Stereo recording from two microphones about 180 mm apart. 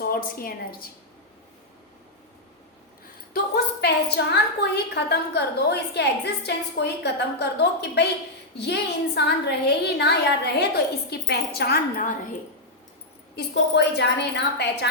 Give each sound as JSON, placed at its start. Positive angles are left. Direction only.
{"t": 0.0, "sound": "a woman's voice", "side_deg": 55}
{"t": 3.3, "sound": "a woman's voice", "side_deg": 65}
{"t": 13.3, "sound": "a woman's voice", "side_deg": 65}